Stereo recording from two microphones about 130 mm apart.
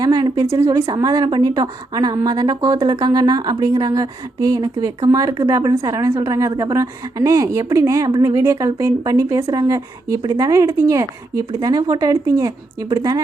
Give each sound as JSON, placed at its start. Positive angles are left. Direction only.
{"t": 0.0, "sound": "a woman's voice", "side_deg": -30}